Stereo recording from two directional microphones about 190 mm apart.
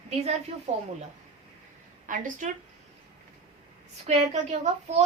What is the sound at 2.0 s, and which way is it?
Speech, 45° right (ahead or behind).